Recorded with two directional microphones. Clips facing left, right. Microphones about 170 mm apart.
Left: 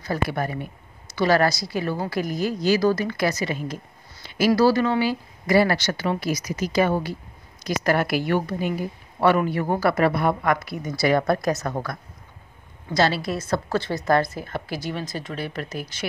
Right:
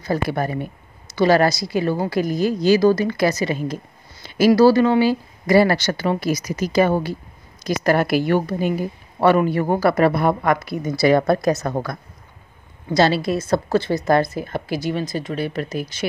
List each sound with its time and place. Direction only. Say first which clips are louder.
0.1 s a woman's voice: right 4 dB; 30° right (ahead or behind)